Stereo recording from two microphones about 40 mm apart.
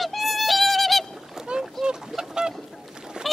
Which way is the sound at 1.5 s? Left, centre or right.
Right.